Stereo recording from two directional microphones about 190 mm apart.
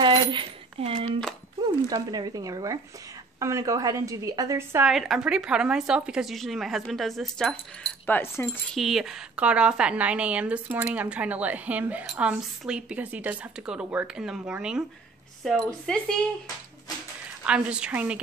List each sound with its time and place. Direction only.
0.0 s a sound: 25° right (ahead or behind)
1.6 s a woman's voice: 20° right (ahead or behind)
4.9 s a woman's voice: centre (ahead or behind)
8.1 s speech: 10° left (ahead or behind)
8.7 s a woman's voice: centre (ahead or behind)
17.5 s a woman's voice: 5° right (ahead or behind)